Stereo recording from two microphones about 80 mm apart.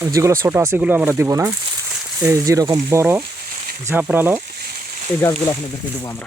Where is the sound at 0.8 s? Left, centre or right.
Centre.